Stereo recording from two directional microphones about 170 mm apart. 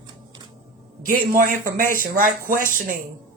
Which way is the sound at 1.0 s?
55° right (ahead or behind).